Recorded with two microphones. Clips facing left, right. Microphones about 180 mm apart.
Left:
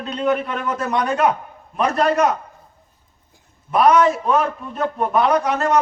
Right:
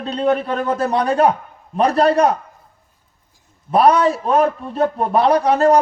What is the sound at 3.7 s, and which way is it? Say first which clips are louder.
A man's voice: right 1 dB; 30° right (ahead or behind).